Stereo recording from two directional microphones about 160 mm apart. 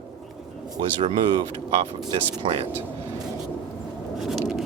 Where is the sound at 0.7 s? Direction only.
30° right (ahead or behind).